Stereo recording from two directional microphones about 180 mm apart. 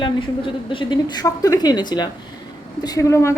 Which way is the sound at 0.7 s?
25° left (ahead or behind).